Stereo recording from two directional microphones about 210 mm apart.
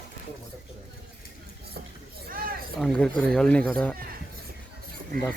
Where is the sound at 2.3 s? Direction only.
45° right (ahead or behind).